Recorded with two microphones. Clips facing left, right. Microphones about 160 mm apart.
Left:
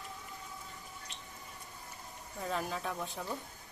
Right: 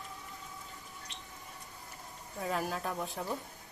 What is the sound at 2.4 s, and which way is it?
Speech, 5° right (ahead or behind).